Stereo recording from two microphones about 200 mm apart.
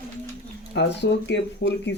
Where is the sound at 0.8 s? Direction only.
60° left (ahead or behind).